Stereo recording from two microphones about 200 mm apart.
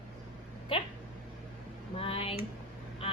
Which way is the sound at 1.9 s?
30° left (ahead or behind).